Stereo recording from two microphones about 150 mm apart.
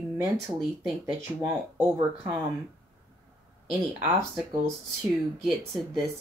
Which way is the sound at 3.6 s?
5° right (ahead or behind).